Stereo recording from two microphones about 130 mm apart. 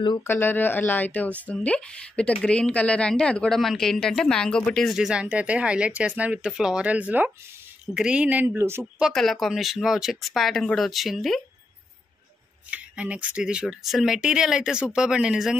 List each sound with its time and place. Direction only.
0.2 s a woman's voice: 15° left (ahead or behind); by 8.8 s 20° right (ahead or behind)
9.0 s a woman's voice: centre (ahead or behind)
12.7 s speech: 10° right (ahead or behind)